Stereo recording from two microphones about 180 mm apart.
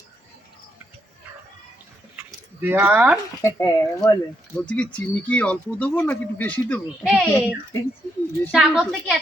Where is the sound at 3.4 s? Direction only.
15° left (ahead or behind).